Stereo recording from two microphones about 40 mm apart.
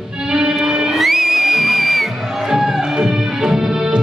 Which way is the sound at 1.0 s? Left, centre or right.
Centre.